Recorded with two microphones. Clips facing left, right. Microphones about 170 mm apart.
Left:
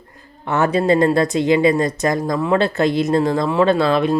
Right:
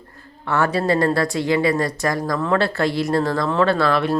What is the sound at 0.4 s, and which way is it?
Speech, 20° left (ahead or behind).